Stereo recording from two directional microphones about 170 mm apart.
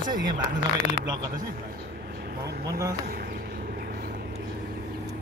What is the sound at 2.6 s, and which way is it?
Speech, 20° right (ahead or behind).